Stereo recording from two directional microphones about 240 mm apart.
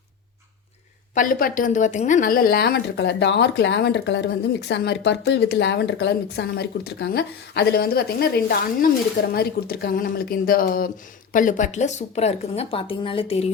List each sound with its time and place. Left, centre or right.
1.1 s a woman's voice: left